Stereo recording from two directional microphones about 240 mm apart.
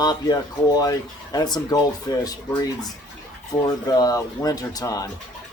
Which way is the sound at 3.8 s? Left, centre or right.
Centre.